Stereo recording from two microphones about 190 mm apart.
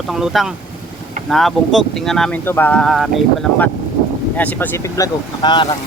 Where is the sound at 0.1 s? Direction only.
Centre (ahead or behind); by 5.6 s 25° left (ahead or behind).